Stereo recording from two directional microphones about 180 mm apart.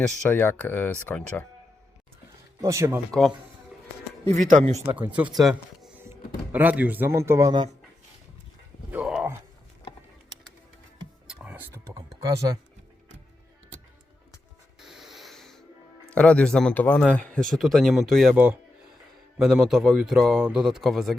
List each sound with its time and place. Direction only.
0.0 s speech: 5° left (ahead or behind)
2.6 s speech: 15° right (ahead or behind)
3.1 s a man's voice: centre (ahead or behind)
4.9 s speech: 10° right (ahead or behind)
8.9 s a sound: 5° right (ahead or behind)
11.3 s a sound: 10° right (ahead or behind)
14.8 s music: centre (ahead or behind)
16.1 s a man's voice: 5° left (ahead or behind)